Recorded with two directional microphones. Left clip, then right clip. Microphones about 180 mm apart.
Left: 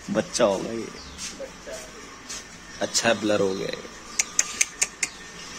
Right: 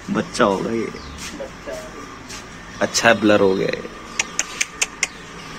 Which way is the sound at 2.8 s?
5° left (ahead or behind).